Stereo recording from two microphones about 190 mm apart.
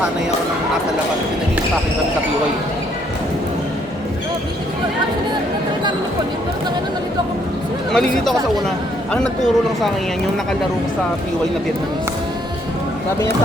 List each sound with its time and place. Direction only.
7.9 s speech: centre (ahead or behind)